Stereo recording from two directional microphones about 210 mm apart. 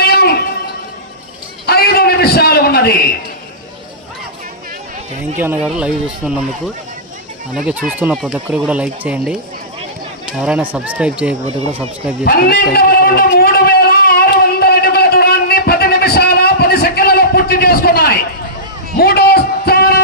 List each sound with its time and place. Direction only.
0.0 s music: 50° left (ahead or behind)
1.6 s a sound: 50° left (ahead or behind)
5.4 s speech: 5° right (ahead or behind)
7.7 s speech: 5° right (ahead or behind)
11.4 s speech: 30° right (ahead or behind)
12.2 s a sound: 45° left (ahead or behind)